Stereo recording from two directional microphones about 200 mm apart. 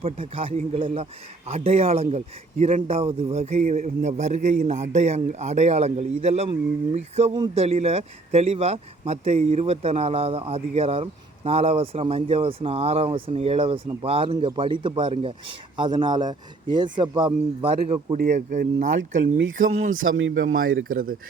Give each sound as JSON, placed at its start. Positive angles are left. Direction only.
{"t": 0.3, "sound": "a man's voice", "side_deg": -30}
{"t": 18.3, "sound": "a man's voice", "side_deg": -40}
{"t": 19.4, "sound": "speech", "side_deg": -80}
{"t": 20.4, "sound": "speech", "side_deg": -45}